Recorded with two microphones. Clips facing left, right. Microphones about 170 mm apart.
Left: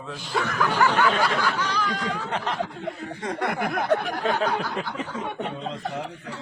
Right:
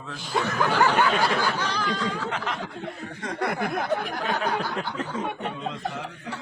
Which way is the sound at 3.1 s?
25° left (ahead or behind).